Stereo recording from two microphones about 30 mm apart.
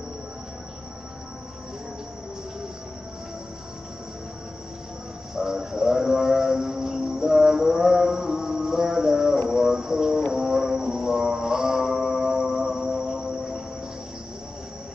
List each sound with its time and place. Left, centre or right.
5.3 s a sound: centre
10.3 s music: centre
12.2 s music: right
12.5 s cricket: right